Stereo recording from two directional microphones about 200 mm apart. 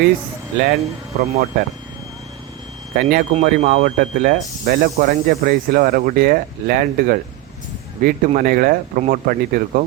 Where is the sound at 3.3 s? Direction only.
35° right (ahead or behind).